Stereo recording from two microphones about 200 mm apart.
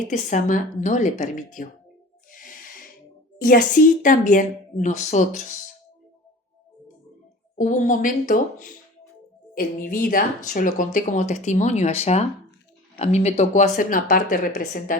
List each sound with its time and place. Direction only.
0.1 s speech: 40° left (ahead or behind)
2.3 s music: 45° left (ahead or behind)
3.4 s speech: 40° left (ahead or behind)
7.6 s speech: 40° left (ahead or behind)